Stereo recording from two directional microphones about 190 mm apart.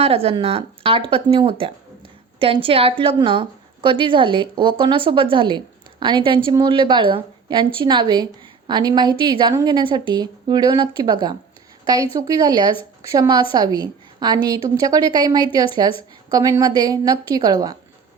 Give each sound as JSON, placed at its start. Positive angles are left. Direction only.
{"t": 0.0, "sound": "a woman's voice", "side_deg": -30}